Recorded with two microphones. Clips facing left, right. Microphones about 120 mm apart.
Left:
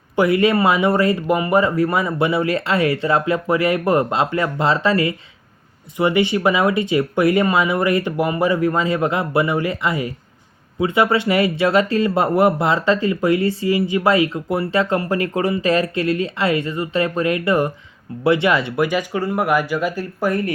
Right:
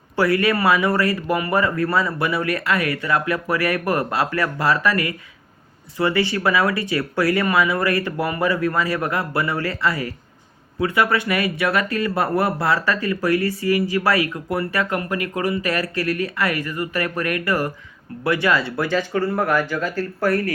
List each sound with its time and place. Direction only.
0.2 s speech: 20° left (ahead or behind)